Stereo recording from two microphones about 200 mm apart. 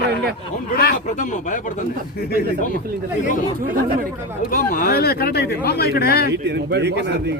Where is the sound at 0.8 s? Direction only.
45° left (ahead or behind).